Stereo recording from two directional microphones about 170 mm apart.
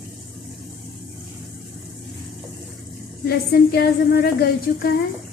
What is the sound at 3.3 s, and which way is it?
A woman's voice, 70° left (ahead or behind).